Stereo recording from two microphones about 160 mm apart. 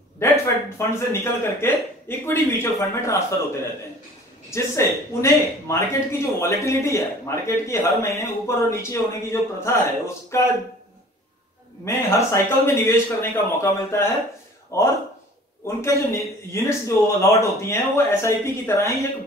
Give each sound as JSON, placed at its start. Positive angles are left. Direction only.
{"t": 0.7, "sound": "speech", "side_deg": 15}
{"t": 4.5, "sound": "speech", "side_deg": 15}
{"t": 11.8, "sound": "speech", "side_deg": 20}